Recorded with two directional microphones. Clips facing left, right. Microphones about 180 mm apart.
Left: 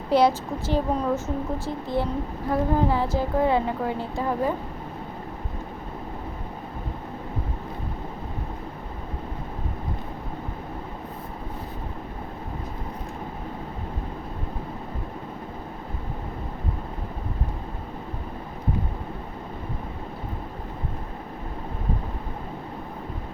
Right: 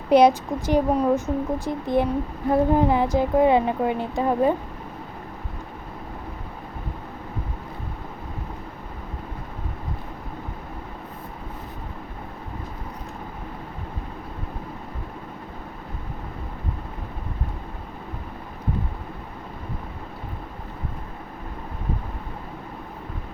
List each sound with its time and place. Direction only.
0.1 s a woman's voice: 20° right (ahead or behind)